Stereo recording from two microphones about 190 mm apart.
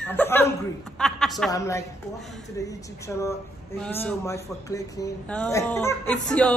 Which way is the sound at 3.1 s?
10° left (ahead or behind).